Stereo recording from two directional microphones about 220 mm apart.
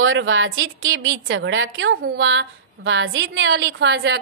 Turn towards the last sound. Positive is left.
turn(degrees=-50)  # may be behind; listen again after turning